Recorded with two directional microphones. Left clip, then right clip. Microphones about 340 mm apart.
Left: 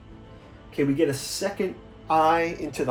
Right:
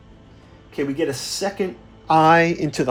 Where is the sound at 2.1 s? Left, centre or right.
Right.